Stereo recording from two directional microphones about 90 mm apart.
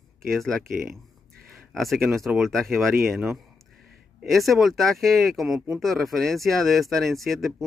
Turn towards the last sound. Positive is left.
turn(degrees=0)  # may be behind; listen again after turning